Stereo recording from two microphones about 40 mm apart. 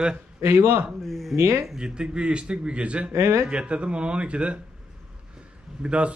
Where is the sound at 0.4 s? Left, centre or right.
Right.